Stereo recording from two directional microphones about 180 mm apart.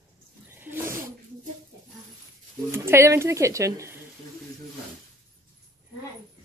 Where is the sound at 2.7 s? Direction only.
15° right (ahead or behind).